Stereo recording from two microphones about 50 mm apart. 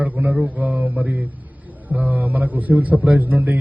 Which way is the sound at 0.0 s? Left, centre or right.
Right.